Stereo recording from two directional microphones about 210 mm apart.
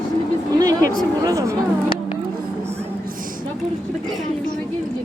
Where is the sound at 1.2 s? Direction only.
15° right (ahead or behind).